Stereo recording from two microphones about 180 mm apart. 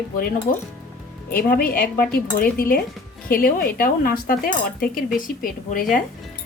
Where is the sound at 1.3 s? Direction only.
55° left (ahead or behind).